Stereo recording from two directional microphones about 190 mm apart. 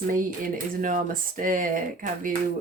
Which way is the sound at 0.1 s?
45° right (ahead or behind).